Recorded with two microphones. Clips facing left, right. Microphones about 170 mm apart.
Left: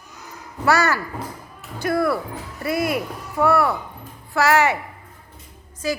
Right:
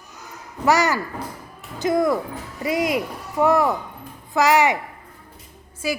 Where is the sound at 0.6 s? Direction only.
15° right (ahead or behind).